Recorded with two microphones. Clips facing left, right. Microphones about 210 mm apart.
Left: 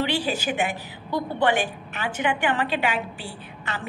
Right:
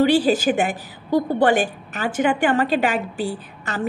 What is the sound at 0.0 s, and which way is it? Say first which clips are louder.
A woman's voice: right 9 dB; 45° right (ahead or behind).